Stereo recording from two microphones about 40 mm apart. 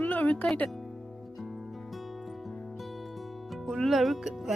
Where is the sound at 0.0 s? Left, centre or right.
Left.